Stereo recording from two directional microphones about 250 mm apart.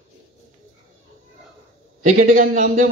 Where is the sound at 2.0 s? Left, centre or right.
Right.